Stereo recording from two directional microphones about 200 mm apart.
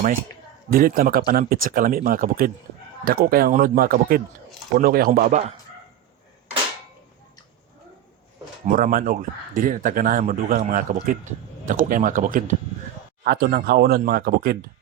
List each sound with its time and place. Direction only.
0.7 s speech: 45° right (ahead or behind)
8.6 s a man's voice: 45° right (ahead or behind)